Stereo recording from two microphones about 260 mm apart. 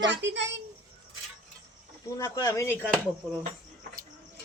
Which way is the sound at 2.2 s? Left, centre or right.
Centre.